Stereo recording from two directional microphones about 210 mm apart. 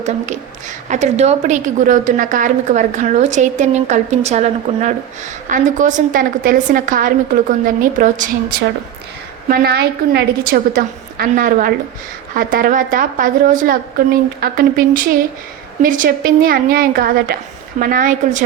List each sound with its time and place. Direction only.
0.9 s a woman's voice: 35° right (ahead or behind)
9.5 s a woman's voice: 50° right (ahead or behind)